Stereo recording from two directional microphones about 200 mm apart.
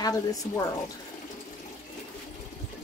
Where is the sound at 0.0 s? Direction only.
15° left (ahead or behind).